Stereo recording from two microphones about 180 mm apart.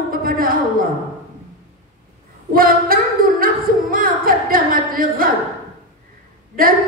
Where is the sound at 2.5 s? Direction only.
55° right (ahead or behind).